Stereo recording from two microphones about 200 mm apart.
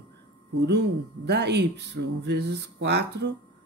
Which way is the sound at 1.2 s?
60° right (ahead or behind).